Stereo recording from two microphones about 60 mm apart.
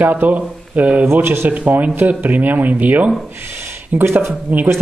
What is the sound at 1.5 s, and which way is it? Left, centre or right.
Speech, right.